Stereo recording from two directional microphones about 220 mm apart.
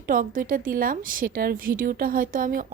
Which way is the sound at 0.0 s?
40° right (ahead or behind).